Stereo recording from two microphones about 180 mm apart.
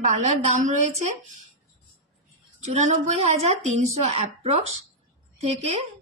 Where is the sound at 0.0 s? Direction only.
40° right (ahead or behind).